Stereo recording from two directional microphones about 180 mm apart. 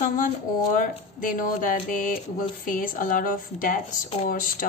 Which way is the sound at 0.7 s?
50° left (ahead or behind).